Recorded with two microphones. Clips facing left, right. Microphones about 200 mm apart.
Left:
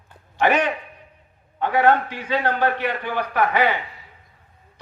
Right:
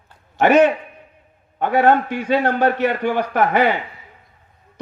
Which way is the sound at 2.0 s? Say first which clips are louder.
Right 5 dB; 50° right (ahead or behind).